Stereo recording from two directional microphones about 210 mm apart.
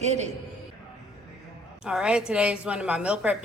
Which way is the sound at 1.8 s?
5° right (ahead or behind).